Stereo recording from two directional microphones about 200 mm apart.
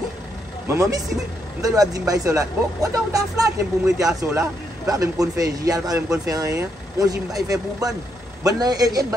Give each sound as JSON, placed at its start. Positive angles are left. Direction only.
{"t": 0.7, "sound": "a man's voice", "side_deg": -15}